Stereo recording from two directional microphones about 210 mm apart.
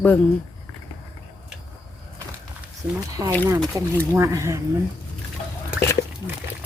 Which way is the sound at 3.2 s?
15° right (ahead or behind).